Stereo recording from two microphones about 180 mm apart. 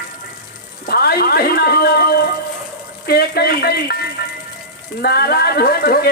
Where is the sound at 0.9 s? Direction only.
60° left (ahead or behind).